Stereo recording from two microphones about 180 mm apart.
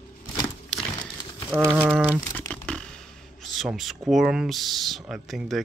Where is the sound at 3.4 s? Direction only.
Centre (ahead or behind).